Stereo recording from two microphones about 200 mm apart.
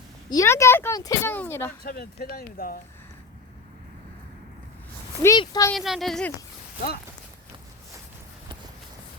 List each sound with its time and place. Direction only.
0.3 s speech: 15° left (ahead or behind)
1.8 s speech: 50° left (ahead or behind)
5.2 s speech: 15° left (ahead or behind)
5.7 s a woman's voice: centre (ahead or behind)